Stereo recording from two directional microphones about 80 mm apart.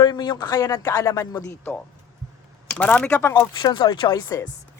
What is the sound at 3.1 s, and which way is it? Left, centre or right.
Speech, left.